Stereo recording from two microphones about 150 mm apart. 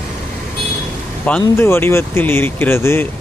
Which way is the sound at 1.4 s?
15° left (ahead or behind).